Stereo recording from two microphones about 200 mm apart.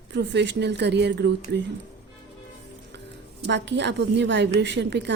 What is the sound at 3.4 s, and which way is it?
A woman's voice, 60° right (ahead or behind).